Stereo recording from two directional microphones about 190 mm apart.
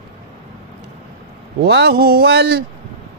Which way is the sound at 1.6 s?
60° right (ahead or behind).